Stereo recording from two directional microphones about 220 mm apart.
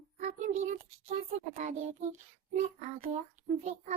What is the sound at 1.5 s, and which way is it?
A child's voice, 35° right (ahead or behind).